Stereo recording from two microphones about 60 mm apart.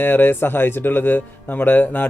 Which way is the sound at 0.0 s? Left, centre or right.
Left.